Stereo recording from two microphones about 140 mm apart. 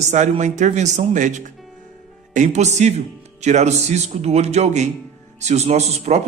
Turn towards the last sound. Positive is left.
turn(degrees=-50)  # may be behind; listen again after turning